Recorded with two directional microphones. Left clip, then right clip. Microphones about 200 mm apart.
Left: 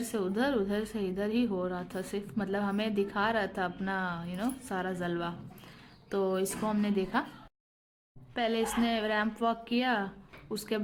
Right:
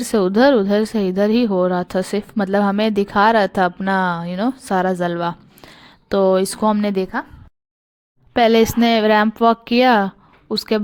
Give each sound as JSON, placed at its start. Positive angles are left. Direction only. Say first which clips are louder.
{"t": 0.1, "sound": "a woman's voice", "louder": "right 18 dB", "side_deg": -45}
{"t": 8.3, "sound": "a woman's voice", "louder": "right 17 dB", "side_deg": -45}